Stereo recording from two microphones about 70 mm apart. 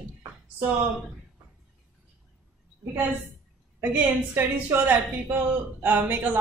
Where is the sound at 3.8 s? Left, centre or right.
Right.